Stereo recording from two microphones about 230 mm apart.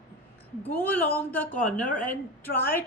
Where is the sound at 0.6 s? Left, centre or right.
Centre.